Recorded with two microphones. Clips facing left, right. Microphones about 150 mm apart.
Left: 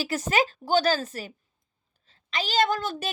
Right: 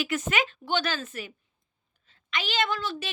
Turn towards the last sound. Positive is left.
turn(degrees=45)  # may be behind; listen again after turning